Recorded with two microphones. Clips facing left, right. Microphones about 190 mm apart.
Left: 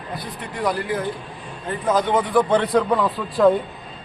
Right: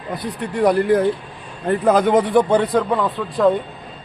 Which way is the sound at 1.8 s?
60° right (ahead or behind).